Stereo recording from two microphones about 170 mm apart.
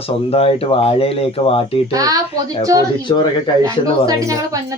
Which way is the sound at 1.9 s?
20° right (ahead or behind).